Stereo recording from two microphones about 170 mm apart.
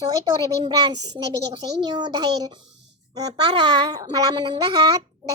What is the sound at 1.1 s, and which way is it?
A child's voice, 25° right (ahead or behind).